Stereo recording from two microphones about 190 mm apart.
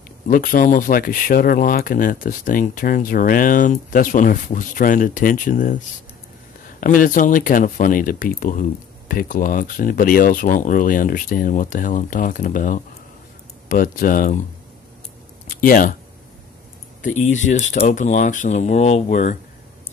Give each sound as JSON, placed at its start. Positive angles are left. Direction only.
{"t": 0.3, "sound": "speech", "side_deg": 45}
{"t": 6.8, "sound": "speech", "side_deg": 45}
{"t": 15.4, "sound": "speech", "side_deg": 45}
{"t": 17.0, "sound": "speech", "side_deg": 40}